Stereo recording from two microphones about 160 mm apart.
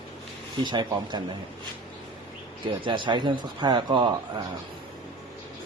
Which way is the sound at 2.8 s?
30° right (ahead or behind).